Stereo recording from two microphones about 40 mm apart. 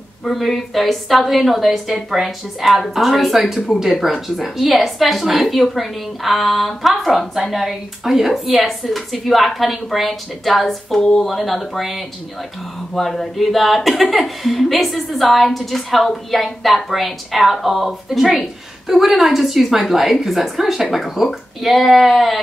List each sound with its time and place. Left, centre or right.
0.2 s speech: centre